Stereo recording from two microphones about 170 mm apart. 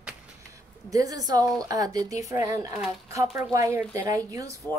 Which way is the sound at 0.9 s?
20° right (ahead or behind).